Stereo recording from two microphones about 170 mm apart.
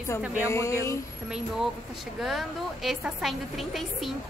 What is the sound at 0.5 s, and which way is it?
Speech, 15° left (ahead or behind).